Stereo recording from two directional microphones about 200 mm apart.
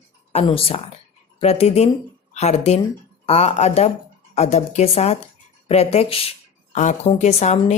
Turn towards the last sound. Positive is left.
turn(degrees=35)  # may be behind; listen again after turning